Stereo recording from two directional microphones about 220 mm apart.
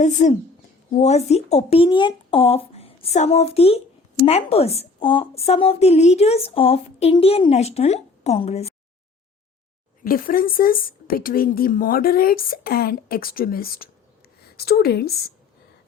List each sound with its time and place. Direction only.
0.0 s a woman's voice: 35° left (ahead or behind)
10.0 s a woman's voice: 40° left (ahead or behind)